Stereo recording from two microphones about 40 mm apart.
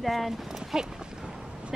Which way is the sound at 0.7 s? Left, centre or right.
Centre.